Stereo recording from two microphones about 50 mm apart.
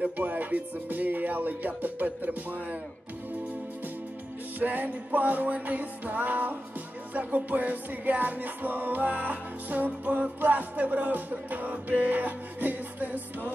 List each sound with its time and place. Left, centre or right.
0.0 s music: right
4.6 s music: right